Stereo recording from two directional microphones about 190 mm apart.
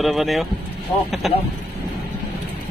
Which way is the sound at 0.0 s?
Centre (ahead or behind).